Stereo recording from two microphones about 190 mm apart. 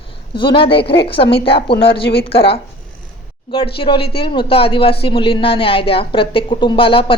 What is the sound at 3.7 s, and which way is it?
A woman's voice, 25° left (ahead or behind).